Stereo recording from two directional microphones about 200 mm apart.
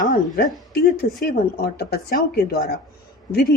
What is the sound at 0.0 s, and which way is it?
A woman's voice, 45° left (ahead or behind).